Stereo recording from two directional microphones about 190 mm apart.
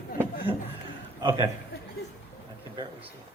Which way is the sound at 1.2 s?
25° right (ahead or behind).